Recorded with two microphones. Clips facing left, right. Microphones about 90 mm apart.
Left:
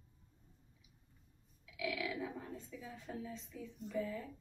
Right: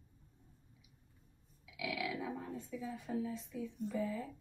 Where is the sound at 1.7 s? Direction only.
15° right (ahead or behind).